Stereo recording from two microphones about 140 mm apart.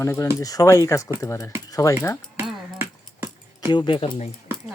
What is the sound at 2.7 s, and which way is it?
Keys jangling, 15° right (ahead or behind).